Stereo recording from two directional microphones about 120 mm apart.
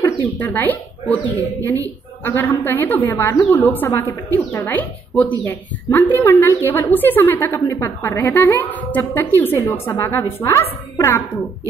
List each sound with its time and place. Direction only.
0.4 s a woman's voice: 15° left (ahead or behind)
2.2 s a woman's voice: 15° left (ahead or behind)